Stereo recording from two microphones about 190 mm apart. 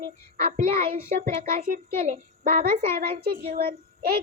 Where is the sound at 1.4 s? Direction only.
45° right (ahead or behind).